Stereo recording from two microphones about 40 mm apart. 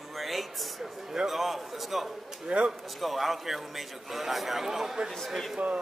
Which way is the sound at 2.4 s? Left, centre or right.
Right.